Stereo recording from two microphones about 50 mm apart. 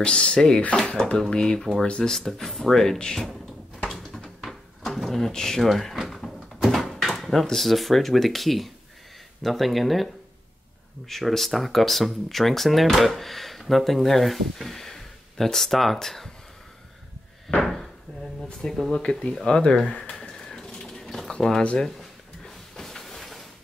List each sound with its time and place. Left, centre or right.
0.0 s speech: centre
2.1 s speech: centre
3.9 s drawer open or close: centre
7.4 s speech: centre
17.6 s a sound: centre
18.6 s speech: centre
20.2 s bird: centre
21.3 s speech: centre
22.4 s a sound: centre